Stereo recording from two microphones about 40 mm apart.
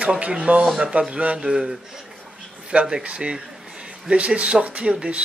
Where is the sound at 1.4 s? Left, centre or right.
Centre.